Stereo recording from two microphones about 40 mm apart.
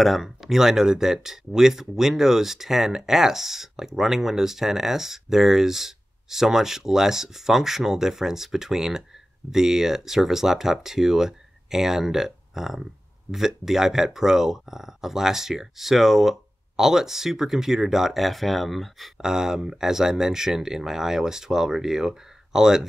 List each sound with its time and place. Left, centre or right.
0.0 s speech: centre
19.2 s speech: centre